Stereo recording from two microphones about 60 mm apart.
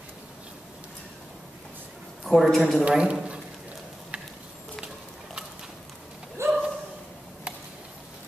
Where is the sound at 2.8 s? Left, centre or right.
Centre.